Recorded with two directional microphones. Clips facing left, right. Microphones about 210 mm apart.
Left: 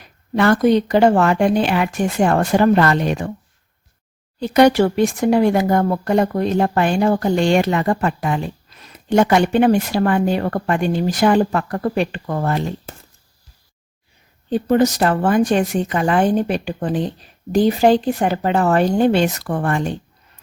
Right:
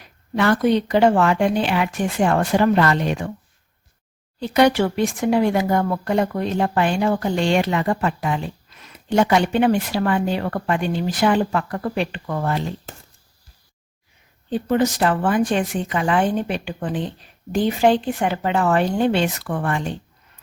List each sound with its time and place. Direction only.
0.3 s speech: 45° left (ahead or behind)
4.4 s speech: 40° left (ahead or behind)
14.5 s speech: 40° left (ahead or behind)